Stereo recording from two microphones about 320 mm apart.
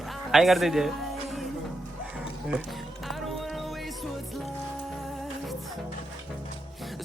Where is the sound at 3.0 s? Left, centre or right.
Centre.